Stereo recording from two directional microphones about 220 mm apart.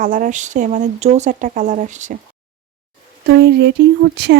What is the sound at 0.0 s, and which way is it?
Speech, 35° right (ahead or behind).